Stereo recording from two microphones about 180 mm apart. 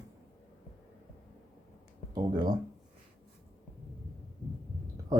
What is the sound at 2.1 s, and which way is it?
Speech, 25° right (ahead or behind).